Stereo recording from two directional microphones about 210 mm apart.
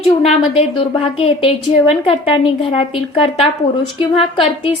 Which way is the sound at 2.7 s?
25° left (ahead or behind).